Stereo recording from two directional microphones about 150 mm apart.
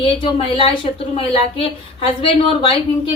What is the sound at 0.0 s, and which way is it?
A woman's voice, 40° left (ahead or behind).